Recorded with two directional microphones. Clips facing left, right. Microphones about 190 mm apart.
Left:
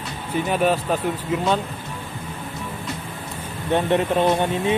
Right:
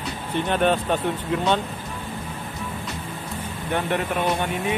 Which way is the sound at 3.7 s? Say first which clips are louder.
Left 5 dB; 20° left (ahead or behind).